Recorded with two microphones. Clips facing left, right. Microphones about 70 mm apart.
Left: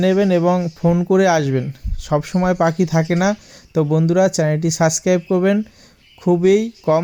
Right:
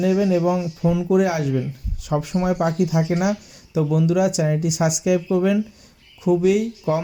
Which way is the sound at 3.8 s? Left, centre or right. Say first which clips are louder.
Left 4 dB; left.